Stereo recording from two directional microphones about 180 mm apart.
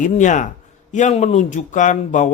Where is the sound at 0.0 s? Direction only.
45° left (ahead or behind).